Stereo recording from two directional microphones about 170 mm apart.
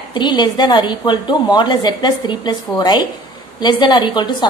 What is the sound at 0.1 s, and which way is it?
A woman's voice, 25° left (ahead or behind).